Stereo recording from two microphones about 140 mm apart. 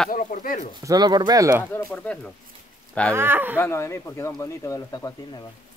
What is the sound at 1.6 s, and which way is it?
Speech, 10° left (ahead or behind).